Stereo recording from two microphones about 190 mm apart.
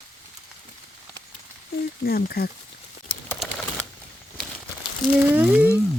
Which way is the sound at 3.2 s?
5° left (ahead or behind).